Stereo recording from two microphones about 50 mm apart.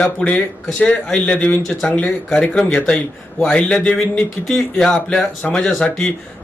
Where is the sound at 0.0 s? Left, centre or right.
Left.